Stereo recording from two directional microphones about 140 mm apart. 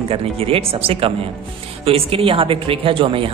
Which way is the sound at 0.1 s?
45° right (ahead or behind).